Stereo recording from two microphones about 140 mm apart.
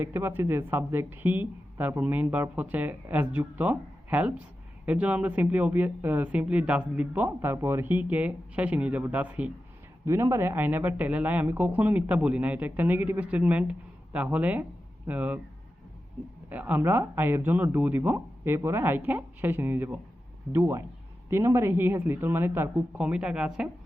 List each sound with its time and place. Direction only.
0.0 s speech: 15° right (ahead or behind)
16.5 s a man's voice: 10° right (ahead or behind)